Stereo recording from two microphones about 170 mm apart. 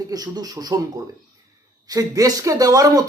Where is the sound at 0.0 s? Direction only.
20° right (ahead or behind).